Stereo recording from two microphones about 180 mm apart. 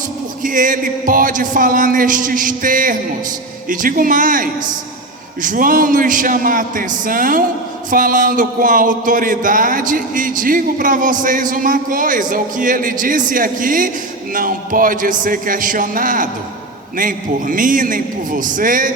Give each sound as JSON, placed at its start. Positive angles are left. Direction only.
{"t": 0.4, "sound": "music", "side_deg": -50}